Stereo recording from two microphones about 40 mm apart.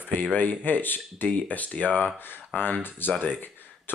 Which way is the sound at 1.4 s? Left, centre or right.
Left.